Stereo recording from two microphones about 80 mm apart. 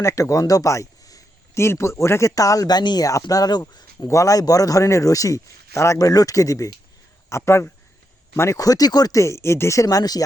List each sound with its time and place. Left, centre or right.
0.0 s speech: left
1.5 s a man's voice: left
3.1 s a man's voice: left
8.5 s a man's voice: left
9.1 s speech: left
9.8 s a man's voice: left